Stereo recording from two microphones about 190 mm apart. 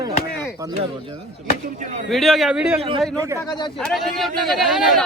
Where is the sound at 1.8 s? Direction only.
40° right (ahead or behind).